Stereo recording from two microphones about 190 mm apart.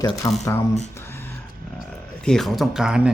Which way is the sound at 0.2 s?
20° left (ahead or behind).